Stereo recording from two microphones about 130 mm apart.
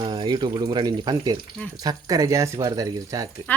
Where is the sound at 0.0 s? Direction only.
35° right (ahead or behind).